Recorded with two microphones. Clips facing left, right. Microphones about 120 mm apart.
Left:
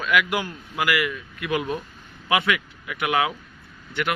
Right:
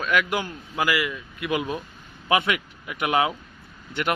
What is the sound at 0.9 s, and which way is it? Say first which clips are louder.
Speech: left 1 dB; 15° right (ahead or behind).